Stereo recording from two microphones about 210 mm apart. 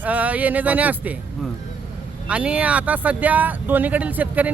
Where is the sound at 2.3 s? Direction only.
5° right (ahead or behind).